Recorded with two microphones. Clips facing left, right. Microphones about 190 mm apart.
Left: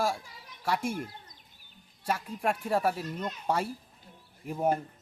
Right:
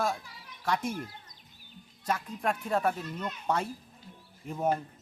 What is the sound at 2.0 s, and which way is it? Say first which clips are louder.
A man's voice: left 1 dB; 10° left (ahead or behind).